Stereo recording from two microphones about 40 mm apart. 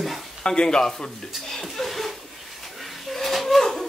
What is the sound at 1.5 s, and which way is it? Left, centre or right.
Chuckle, centre.